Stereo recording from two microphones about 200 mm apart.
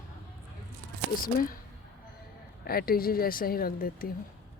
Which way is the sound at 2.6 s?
50° left (ahead or behind).